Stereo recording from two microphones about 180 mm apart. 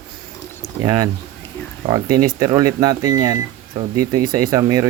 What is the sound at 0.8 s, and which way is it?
Speech, 20° right (ahead or behind).